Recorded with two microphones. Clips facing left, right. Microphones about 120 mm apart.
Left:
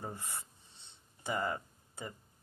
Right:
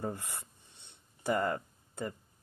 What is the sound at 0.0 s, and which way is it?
Speech, 60° right (ahead or behind).